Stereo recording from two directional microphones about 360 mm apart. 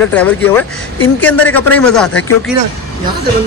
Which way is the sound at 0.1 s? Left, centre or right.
Centre.